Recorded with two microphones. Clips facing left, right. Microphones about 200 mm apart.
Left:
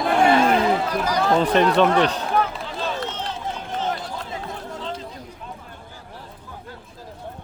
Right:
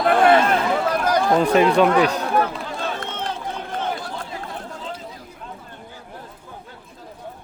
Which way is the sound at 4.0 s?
20° left (ahead or behind).